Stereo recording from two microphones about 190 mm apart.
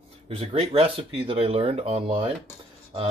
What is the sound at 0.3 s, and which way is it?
Speech, 30° right (ahead or behind).